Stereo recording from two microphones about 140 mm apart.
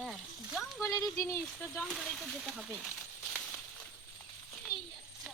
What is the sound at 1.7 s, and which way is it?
Speech, centre (ahead or behind).